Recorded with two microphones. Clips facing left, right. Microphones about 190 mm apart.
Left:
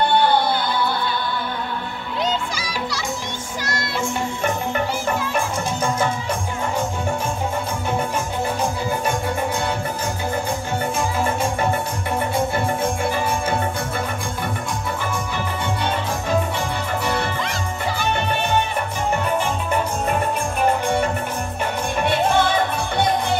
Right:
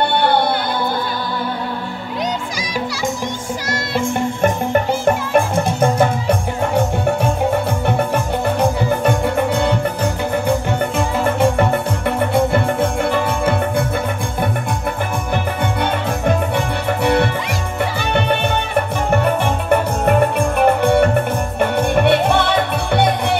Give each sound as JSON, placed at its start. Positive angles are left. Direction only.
{"t": 5.0, "sound": "music", "side_deg": -55}
{"t": 8.5, "sound": "music", "side_deg": -65}
{"t": 11.0, "sound": "music", "side_deg": -65}
{"t": 15.3, "sound": "music", "side_deg": -60}
{"t": 19.0, "sound": "music", "side_deg": -60}